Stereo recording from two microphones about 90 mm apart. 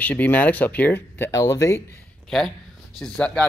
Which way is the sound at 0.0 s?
20° left (ahead or behind).